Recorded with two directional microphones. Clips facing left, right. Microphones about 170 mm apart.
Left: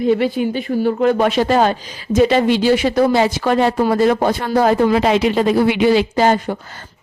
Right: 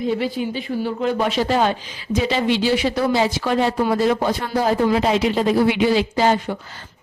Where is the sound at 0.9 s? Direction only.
55° left (ahead or behind).